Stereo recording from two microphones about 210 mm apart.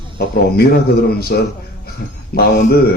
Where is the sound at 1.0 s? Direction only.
45° left (ahead or behind).